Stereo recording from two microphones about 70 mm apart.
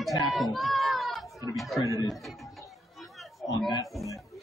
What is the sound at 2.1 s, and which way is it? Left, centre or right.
Speech, centre.